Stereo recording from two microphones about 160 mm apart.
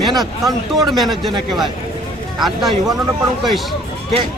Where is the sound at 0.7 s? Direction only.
Centre (ahead or behind).